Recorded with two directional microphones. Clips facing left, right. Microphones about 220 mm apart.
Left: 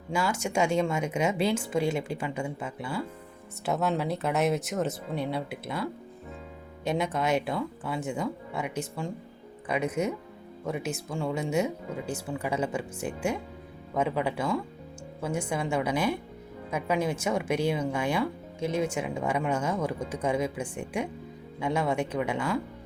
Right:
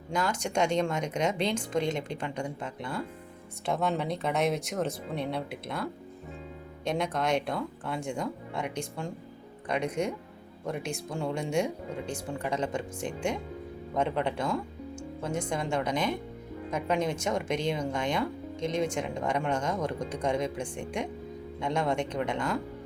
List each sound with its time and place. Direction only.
0.1 s speech: 5° left (ahead or behind)